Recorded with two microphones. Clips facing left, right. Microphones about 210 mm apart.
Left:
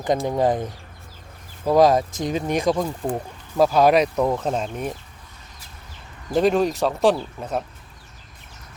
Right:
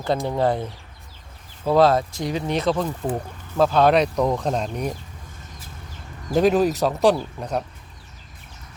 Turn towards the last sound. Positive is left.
turn(degrees=5)  # may be behind; listen again after turning